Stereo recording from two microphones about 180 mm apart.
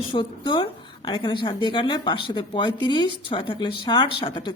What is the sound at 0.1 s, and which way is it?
A woman's voice, 25° left (ahead or behind).